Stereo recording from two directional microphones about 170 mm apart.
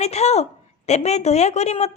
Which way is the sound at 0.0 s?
40° left (ahead or behind).